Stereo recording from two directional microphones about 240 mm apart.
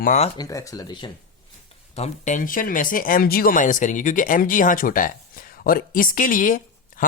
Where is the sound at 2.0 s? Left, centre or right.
Left.